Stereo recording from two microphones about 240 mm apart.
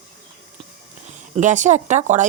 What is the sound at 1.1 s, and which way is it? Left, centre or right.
Speech, right.